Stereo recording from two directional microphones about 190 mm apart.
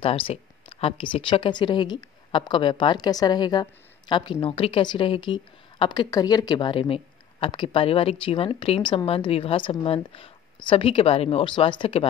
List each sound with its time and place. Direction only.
0.0 s a woman's voice: 30° left (ahead or behind)